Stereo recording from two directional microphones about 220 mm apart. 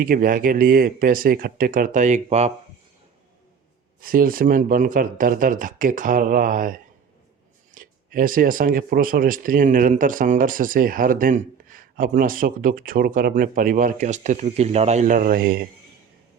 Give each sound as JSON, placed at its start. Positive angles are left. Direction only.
{"t": 0.0, "sound": "speech", "side_deg": -40}
{"t": 4.0, "sound": "speech", "side_deg": -40}